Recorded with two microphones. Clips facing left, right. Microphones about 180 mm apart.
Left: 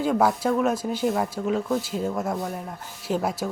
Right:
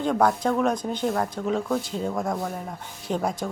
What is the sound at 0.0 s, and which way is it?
Speech, 5° left (ahead or behind).